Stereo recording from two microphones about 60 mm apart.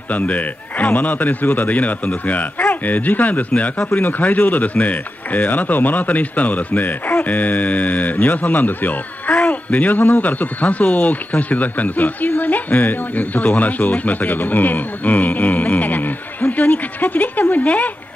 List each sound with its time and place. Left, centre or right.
0.1 s speech: left